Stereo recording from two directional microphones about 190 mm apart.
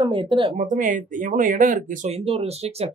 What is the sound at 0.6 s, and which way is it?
Speech, 45° right (ahead or behind).